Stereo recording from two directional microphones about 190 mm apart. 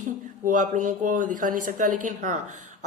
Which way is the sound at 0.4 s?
40° right (ahead or behind).